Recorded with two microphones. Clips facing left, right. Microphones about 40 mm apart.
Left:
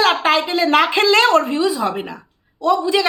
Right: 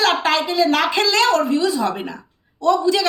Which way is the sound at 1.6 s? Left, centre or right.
Centre.